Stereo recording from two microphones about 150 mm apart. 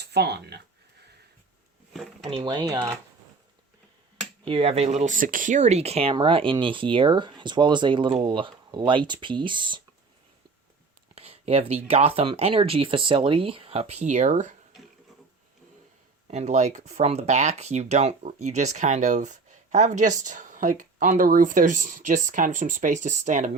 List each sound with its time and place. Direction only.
0.0 s speech: 90° right
1.9 s a sound: centre (ahead or behind)
2.4 s speech: 25° right (ahead or behind)
4.4 s speech: 40° right (ahead or behind)
11.1 s speech: 40° right (ahead or behind)
16.2 s speech: 50° right (ahead or behind)